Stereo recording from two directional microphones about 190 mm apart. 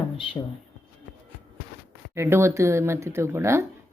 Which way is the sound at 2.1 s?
15° right (ahead or behind).